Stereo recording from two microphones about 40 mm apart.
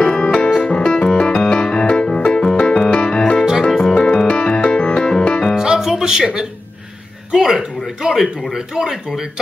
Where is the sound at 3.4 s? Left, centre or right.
Centre.